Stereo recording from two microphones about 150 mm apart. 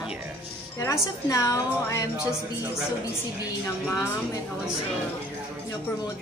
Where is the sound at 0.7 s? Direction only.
20° left (ahead or behind).